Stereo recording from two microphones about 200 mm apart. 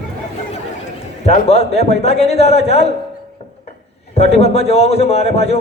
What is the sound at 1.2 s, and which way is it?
A man's voice, 30° left (ahead or behind).